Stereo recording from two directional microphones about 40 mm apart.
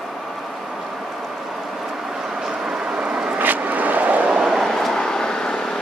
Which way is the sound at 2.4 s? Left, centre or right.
Right.